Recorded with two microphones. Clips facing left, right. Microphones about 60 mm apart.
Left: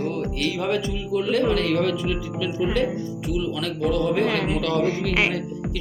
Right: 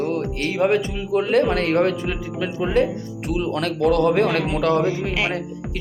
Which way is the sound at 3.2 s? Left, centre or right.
Right.